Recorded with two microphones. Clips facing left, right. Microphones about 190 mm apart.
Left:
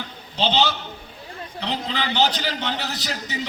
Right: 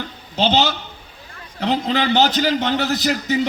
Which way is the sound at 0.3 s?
45° right (ahead or behind).